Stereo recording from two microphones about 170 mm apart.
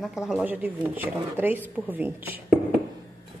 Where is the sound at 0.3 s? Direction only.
10° right (ahead or behind).